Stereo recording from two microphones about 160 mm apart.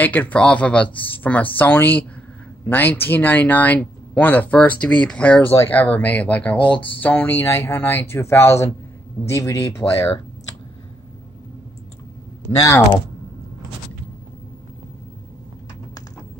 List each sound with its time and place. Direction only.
0.0 s speech: 10° left (ahead or behind)
12.4 s speech: 15° left (ahead or behind)